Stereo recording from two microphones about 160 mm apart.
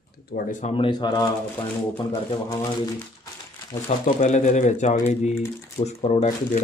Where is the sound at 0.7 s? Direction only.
30° left (ahead or behind).